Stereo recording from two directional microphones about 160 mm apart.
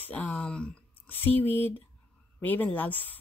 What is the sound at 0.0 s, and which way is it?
Speech, 10° left (ahead or behind).